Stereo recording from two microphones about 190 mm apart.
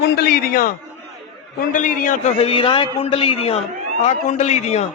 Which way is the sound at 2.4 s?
30° left (ahead or behind).